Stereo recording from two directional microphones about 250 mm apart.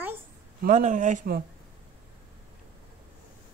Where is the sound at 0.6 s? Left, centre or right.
Right.